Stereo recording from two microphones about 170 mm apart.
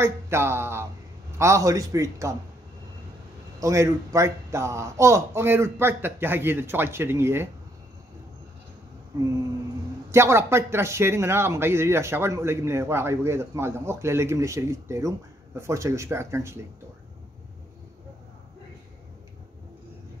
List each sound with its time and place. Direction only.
0.0 s a man's voice: 15° right (ahead or behind)
3.5 s a man's voice: 20° right (ahead or behind)
9.2 s a man's voice: 20° right (ahead or behind)